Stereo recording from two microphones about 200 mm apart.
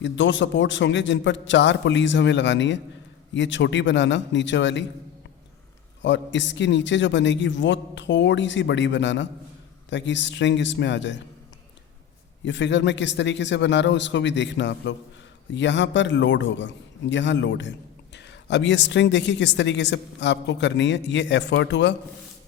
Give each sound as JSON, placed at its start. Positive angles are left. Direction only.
{"t": 0.0, "sound": "a man's voice", "side_deg": 65}
{"t": 6.0, "sound": "a man's voice", "side_deg": 65}
{"t": 12.5, "sound": "a man's voice", "side_deg": 65}